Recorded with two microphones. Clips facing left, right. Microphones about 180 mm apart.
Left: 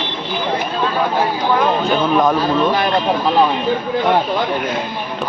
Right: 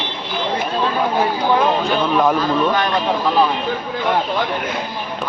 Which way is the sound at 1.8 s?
5° left (ahead or behind).